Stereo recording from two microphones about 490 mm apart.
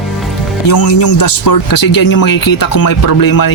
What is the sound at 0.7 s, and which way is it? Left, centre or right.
Speech, left.